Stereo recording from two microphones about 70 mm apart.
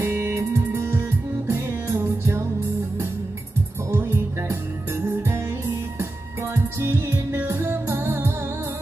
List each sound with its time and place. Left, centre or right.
0.0 s music: right
3.9 s music: right
6.5 s music: right